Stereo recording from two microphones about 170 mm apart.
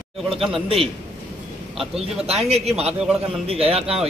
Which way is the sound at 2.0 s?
35° right (ahead or behind).